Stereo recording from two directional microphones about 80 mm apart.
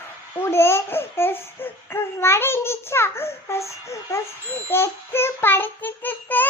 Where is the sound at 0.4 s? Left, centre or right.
Left.